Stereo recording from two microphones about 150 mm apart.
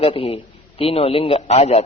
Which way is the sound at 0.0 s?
40° left (ahead or behind).